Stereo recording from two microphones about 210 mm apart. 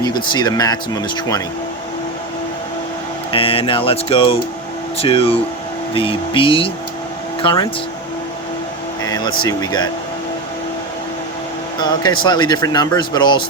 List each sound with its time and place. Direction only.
0.0 s speech: 20° left (ahead or behind)
3.3 s speech: 25° left (ahead or behind)
9.0 s vehicle: 20° left (ahead or behind)
9.5 s speech: 20° left (ahead or behind)
11.8 s speech: 20° left (ahead or behind)